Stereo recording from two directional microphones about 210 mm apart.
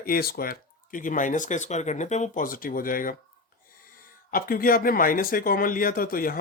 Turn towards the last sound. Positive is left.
turn(degrees=45)  # may be behind; listen again after turning